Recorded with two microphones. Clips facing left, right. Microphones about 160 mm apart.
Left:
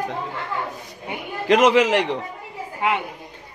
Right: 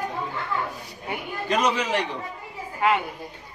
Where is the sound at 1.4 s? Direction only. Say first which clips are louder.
Left 9 dB; 90° left.